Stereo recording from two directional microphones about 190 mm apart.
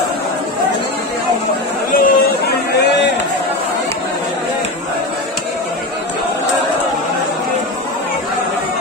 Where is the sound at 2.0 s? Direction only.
55° left (ahead or behind).